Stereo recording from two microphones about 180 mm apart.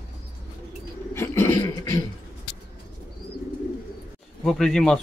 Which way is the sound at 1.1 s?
15° left (ahead or behind).